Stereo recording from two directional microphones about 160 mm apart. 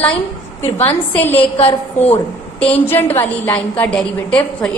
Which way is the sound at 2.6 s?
10° left (ahead or behind).